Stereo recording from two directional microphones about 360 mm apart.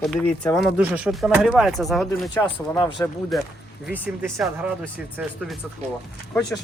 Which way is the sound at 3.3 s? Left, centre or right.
Centre.